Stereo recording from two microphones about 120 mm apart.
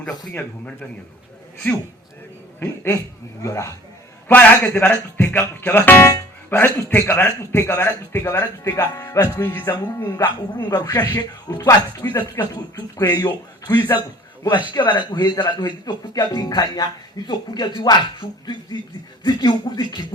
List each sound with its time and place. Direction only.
0.3 s speech: 15° left (ahead or behind)
2.6 s speech: 20° left (ahead or behind)
4.3 s speech: 15° left (ahead or behind); by 9.4 s 30° left (ahead or behind)
9.4 s speech: 20° left (ahead or behind)
10.0 s speech: 30° left (ahead or behind)
14.7 s speech: 40° left (ahead or behind)